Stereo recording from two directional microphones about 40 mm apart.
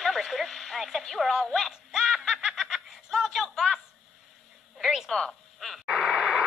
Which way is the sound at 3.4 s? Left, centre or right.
Centre.